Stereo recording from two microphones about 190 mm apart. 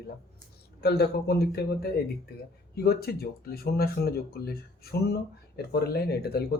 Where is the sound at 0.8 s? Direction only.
55° left (ahead or behind).